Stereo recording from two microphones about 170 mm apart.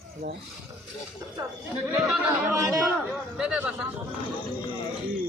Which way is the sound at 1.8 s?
10° right (ahead or behind).